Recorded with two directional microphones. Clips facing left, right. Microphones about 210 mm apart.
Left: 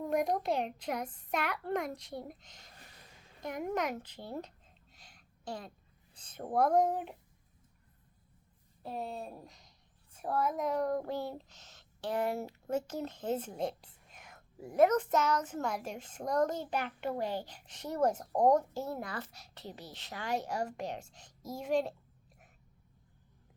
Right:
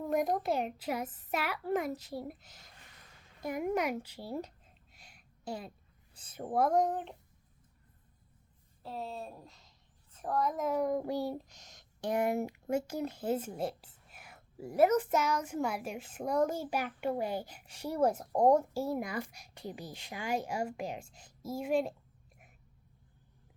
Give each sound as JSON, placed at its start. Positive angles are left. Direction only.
{"t": 0.0, "sound": "a woman's voice", "side_deg": 0}
{"t": 3.4, "sound": "a sound", "side_deg": -10}
{"t": 6.1, "sound": "a woman's voice", "side_deg": -10}
{"t": 8.8, "sound": "speech", "side_deg": 15}